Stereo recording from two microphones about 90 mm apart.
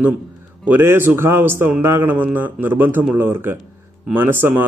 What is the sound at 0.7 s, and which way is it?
A man's voice, 25° right (ahead or behind).